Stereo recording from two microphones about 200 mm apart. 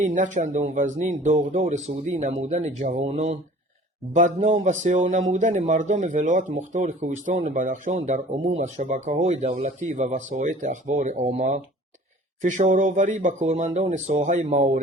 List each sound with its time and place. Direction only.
0.0 s speech: 40° right (ahead or behind)